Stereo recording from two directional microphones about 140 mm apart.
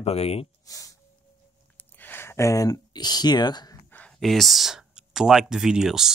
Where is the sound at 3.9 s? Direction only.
5° left (ahead or behind).